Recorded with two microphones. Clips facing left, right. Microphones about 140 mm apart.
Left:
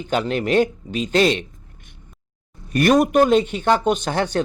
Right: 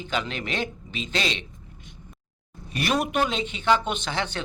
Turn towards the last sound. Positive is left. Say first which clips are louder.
# left 8 dB
turn(degrees=45)  # may be behind; listen again after turning